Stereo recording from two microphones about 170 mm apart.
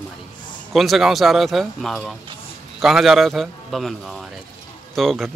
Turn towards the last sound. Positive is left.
turn(degrees=0)  # may be behind; listen again after turning